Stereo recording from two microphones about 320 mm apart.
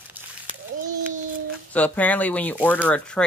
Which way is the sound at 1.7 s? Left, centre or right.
Centre.